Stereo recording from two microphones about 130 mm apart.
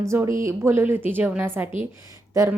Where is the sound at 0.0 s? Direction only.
20° right (ahead or behind).